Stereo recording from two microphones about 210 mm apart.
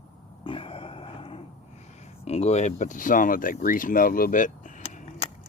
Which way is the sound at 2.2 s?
30° left (ahead or behind).